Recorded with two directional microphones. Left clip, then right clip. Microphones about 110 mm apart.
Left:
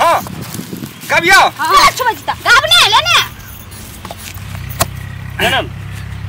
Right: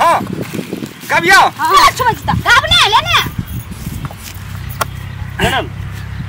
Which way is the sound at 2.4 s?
5° left (ahead or behind).